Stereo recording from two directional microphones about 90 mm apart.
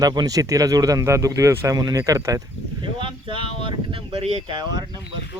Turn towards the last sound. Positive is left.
turn(degrees=-50)  # may be behind; listen again after turning